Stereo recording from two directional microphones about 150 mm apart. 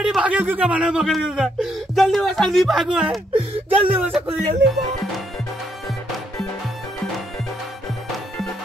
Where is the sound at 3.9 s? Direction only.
10° right (ahead or behind).